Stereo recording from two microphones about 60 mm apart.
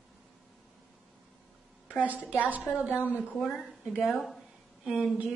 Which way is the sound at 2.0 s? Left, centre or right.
Right.